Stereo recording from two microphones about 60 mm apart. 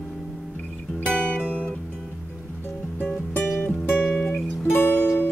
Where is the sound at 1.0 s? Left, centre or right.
Left.